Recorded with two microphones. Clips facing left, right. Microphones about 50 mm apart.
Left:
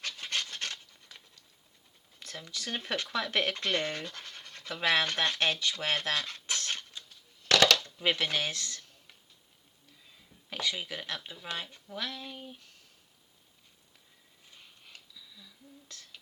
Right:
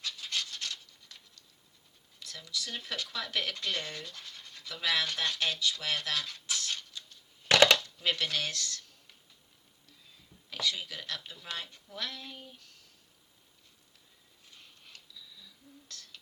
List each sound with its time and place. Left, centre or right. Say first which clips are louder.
0.0 s dog: left 2 dB; left
0.4 s dog: left 2 dB; left
1.0 s patter: left 1 dB; centre
2.1 s speech: right 1 dB; left
7.4 s a sound: right 1 dB; right
7.9 s speech: left 2 dB; left
10.5 s speech: left 1 dB; left
14.5 s a sound: left 1 dB; centre